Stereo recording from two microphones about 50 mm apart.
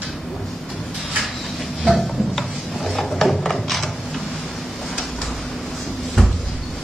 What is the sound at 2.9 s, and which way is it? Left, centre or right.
Mechanisms, centre.